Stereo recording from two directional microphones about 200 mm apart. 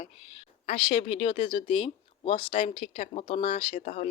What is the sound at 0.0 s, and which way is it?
Speech, 30° left (ahead or behind).